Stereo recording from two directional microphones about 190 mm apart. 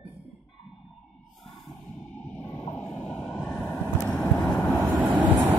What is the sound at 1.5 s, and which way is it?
Music, 25° left (ahead or behind).